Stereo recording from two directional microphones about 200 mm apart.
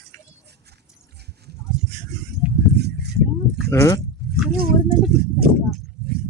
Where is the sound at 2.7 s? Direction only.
55° right (ahead or behind).